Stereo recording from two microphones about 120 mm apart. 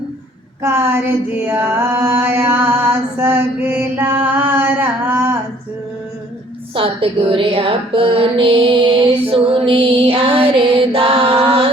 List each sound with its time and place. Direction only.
0.6 s mantra: 20° right (ahead or behind)
6.7 s music: 50° right (ahead or behind)